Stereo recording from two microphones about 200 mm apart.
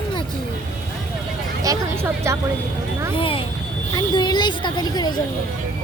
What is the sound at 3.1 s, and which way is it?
Speech, 25° left (ahead or behind).